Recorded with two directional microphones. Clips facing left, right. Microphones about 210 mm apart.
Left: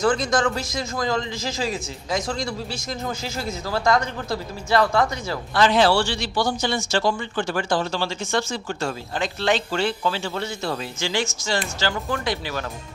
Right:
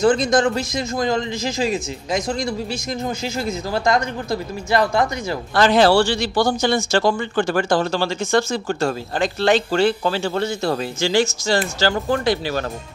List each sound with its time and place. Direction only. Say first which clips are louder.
0.0 s a man's voice: right 5 dB; 20° right (ahead or behind)
5.5 s speech: right 4 dB; 40° right (ahead or behind)